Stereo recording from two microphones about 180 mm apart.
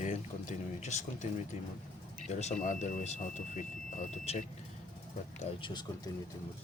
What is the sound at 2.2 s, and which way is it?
Speech, 40° left (ahead or behind).